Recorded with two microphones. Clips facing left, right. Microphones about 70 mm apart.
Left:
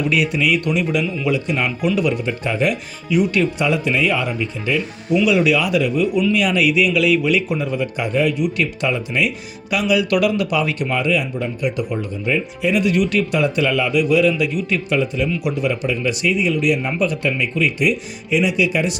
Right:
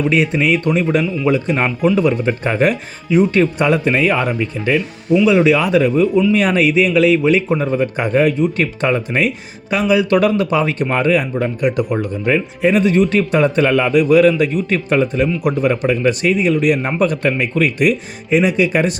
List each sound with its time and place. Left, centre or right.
0.1 s a man's voice: right
3.1 s a man's voice: right
5.2 s a man's voice: right
11.3 s a man's voice: right